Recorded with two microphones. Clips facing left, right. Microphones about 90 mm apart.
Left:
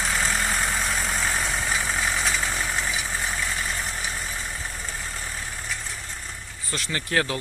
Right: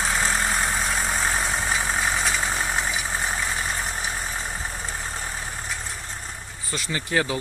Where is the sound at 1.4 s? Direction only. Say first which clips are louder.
Right 2 dB; 10° right (ahead or behind); by 4.0 s 25° right (ahead or behind).